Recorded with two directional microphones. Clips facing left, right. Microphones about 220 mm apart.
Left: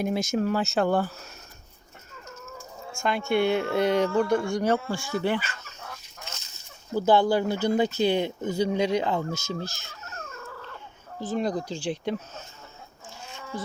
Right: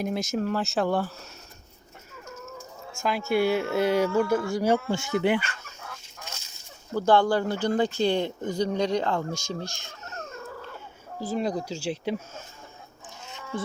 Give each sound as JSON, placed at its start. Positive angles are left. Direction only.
{"t": 0.0, "sound": "speech", "side_deg": 0}
{"t": 2.9, "sound": "speech", "side_deg": -5}
{"t": 4.9, "sound": "speech", "side_deg": -20}
{"t": 6.9, "sound": "speech", "side_deg": 5}
{"t": 11.2, "sound": "speech", "side_deg": -5}